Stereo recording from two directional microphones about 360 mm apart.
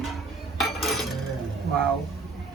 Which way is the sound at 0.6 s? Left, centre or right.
Centre.